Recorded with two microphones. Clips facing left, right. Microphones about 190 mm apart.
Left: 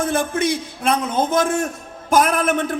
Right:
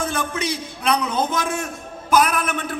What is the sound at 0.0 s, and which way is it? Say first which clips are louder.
A man's voice: left 5 dB; 50° left (ahead or behind).